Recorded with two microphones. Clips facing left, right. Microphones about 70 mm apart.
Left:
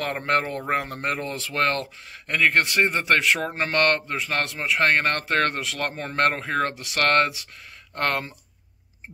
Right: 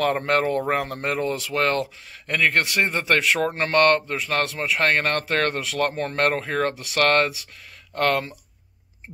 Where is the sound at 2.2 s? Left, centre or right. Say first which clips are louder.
Even; left.